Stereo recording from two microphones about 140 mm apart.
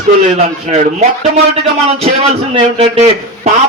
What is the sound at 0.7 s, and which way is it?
A man's voice, 50° right (ahead or behind).